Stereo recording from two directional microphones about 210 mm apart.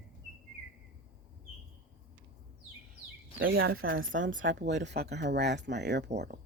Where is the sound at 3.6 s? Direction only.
70° right (ahead or behind); by 6.3 s 55° right (ahead or behind).